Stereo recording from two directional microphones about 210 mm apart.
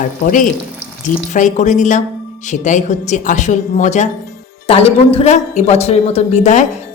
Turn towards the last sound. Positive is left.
turn(degrees=35)  # may be behind; listen again after turning